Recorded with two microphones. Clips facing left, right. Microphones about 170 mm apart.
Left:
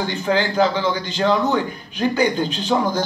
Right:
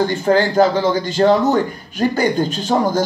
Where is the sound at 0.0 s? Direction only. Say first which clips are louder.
Right 5 dB; 45° right (ahead or behind).